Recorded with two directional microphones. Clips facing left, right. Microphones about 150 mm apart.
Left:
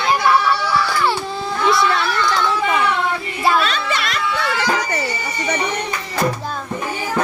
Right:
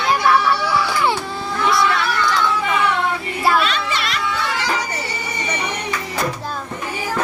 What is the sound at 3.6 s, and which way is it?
Music, 45° left (ahead or behind).